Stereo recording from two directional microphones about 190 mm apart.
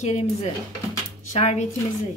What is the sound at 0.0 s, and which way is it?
A woman's voice, 35° left (ahead or behind).